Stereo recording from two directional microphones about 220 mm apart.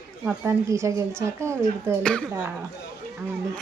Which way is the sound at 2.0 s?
5° left (ahead or behind).